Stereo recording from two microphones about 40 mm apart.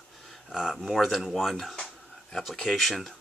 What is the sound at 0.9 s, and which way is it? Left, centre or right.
Speech, centre.